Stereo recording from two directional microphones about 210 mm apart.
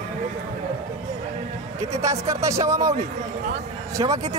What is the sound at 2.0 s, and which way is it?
Speech, 15° right (ahead or behind).